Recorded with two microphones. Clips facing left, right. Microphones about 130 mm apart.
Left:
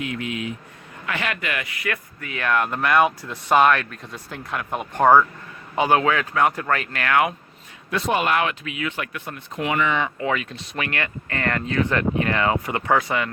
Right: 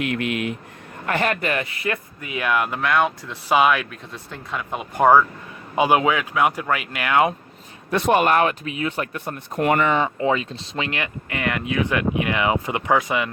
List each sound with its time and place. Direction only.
0.0 s speech: 65° right (ahead or behind)
1.0 s speech: 45° right (ahead or behind); by 7.2 s 15° right (ahead or behind)
8.0 s speech: 50° right (ahead or behind)
10.2 s speech: 25° right (ahead or behind)